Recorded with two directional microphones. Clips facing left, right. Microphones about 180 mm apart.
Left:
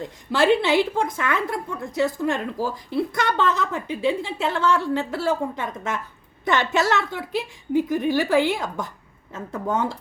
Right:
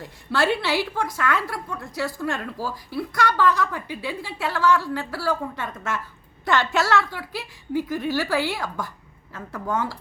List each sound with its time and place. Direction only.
0.0 s a woman's voice: 15° left (ahead or behind)